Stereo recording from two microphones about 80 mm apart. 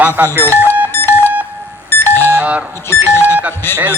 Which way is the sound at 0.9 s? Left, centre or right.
Left.